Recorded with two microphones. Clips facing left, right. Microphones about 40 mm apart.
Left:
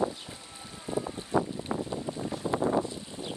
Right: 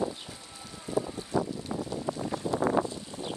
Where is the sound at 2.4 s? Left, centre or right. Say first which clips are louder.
Left 1 dB; centre.